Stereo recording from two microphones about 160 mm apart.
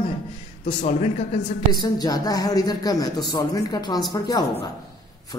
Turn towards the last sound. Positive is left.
turn(degrees=25)  # may be behind; listen again after turning